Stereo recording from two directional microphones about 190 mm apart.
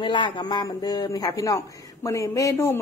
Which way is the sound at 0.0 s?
25° left (ahead or behind).